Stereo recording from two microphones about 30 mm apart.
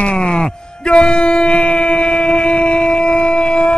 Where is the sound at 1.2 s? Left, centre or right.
Left.